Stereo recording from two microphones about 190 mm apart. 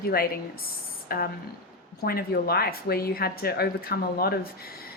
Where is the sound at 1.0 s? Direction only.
50° left (ahead or behind).